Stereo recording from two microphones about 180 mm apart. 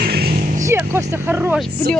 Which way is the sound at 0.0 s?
60° right (ahead or behind).